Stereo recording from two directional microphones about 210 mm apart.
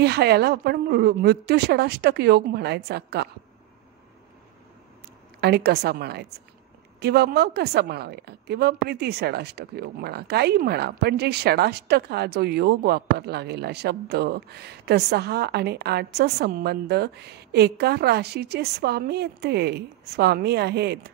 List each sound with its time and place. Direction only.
0.0 s a woman's voice: 50° right (ahead or behind)
5.4 s a woman's voice: 50° right (ahead or behind)